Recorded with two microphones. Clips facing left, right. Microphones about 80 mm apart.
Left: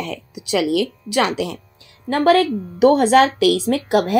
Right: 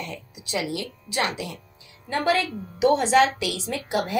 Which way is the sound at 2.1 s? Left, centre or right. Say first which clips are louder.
Left 9 dB; left.